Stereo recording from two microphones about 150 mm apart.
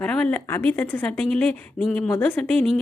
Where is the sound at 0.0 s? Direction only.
5° left (ahead or behind).